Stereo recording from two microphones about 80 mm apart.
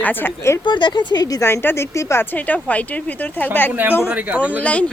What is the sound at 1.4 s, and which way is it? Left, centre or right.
Speech, left.